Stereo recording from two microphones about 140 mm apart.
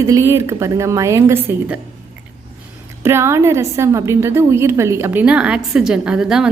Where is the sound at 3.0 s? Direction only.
20° right (ahead or behind).